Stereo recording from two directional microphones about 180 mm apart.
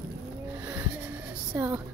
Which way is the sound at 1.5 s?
15° right (ahead or behind).